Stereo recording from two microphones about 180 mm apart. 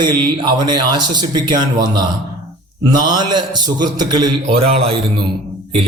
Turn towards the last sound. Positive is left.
turn(degrees=-30)  # may be behind; listen again after turning